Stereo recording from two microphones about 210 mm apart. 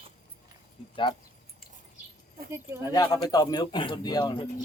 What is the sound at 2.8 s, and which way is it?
Speech, 15° left (ahead or behind).